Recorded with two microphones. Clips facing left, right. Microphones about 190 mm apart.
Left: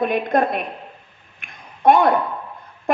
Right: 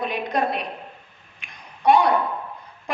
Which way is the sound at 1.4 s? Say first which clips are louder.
Left 5 dB; 50° left (ahead or behind).